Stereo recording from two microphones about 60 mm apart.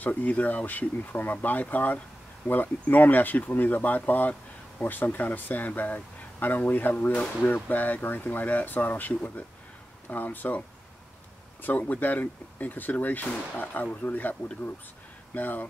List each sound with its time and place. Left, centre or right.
0.0 s speech: left
11.6 s speech: left
15.3 s speech: left